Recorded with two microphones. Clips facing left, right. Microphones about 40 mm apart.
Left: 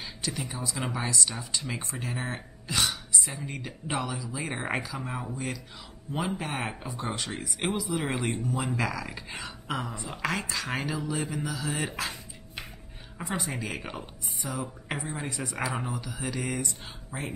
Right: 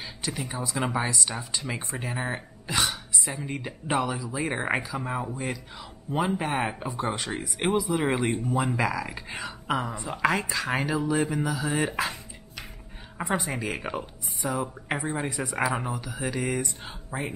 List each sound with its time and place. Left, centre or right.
0.0 s speech: centre
2.8 s speech: centre
13.4 s speech: centre
15.5 s speech: centre
17.1 s speech: right